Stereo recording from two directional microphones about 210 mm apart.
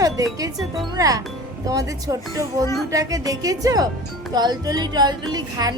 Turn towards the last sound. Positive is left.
turn(degrees=-20)  # may be behind; listen again after turning